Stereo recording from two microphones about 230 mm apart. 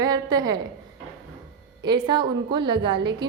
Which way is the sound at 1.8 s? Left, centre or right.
Centre.